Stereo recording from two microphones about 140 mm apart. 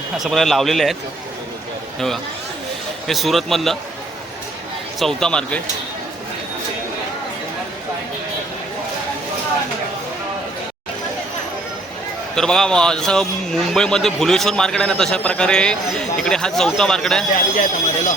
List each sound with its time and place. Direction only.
0.2 s a man's voice: centre (ahead or behind)
3.1 s a man's voice: centre (ahead or behind)
4.9 s a man's voice: 5° left (ahead or behind)
12.4 s a man's voice: 5° left (ahead or behind)
17.3 s speech: 75° left (ahead or behind)